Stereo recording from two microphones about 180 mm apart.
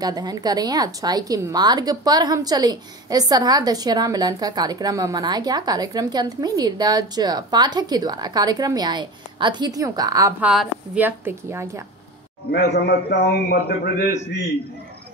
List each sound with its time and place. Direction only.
0.0 s a woman's voice: 20° right (ahead or behind)
10.4 s a woman's voice: 5° right (ahead or behind)
12.7 s a man's voice: 65° left (ahead or behind)